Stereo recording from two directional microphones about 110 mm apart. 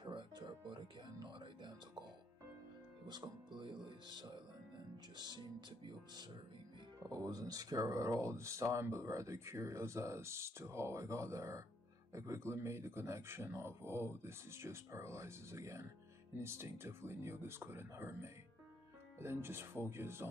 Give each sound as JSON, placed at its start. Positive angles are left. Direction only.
{"t": 0.0, "sound": "music", "side_deg": -45}
{"t": 3.1, "sound": "music", "side_deg": -45}
{"t": 7.0, "sound": "speech", "side_deg": -35}